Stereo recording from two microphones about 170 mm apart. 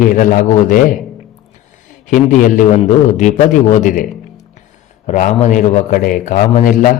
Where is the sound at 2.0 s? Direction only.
50° left (ahead or behind).